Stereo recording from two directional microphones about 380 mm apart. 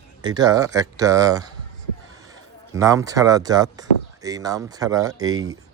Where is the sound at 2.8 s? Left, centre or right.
Centre.